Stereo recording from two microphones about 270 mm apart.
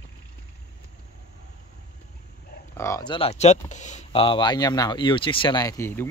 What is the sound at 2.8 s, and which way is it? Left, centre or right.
Speech, centre.